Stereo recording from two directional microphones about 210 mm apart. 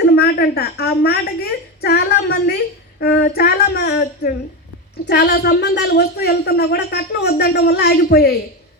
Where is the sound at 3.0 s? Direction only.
50° left (ahead or behind).